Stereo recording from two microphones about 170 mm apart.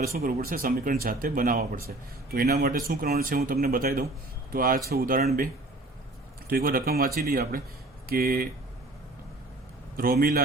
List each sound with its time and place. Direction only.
0.0 s speech: 60° right (ahead or behind)
2.3 s speech: 65° right (ahead or behind)
6.5 s speech: 60° right (ahead or behind)
10.0 s speech: 60° right (ahead or behind)